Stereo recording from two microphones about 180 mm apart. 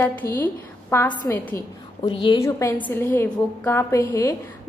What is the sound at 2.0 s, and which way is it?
Speech, 30° left (ahead or behind).